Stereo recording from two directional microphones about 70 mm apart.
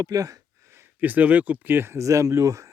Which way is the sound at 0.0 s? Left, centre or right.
Right.